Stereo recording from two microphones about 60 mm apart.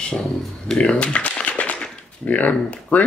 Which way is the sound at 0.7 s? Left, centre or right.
Centre.